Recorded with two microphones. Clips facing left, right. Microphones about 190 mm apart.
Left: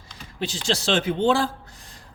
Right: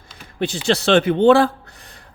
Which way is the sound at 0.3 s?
60° right (ahead or behind).